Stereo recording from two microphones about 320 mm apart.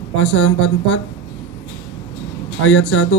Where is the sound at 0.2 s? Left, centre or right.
Left.